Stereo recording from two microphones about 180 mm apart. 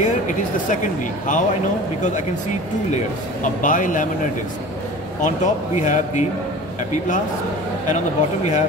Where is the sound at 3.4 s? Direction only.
45° left (ahead or behind).